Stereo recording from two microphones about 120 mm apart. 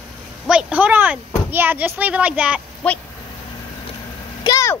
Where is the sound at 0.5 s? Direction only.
10° right (ahead or behind).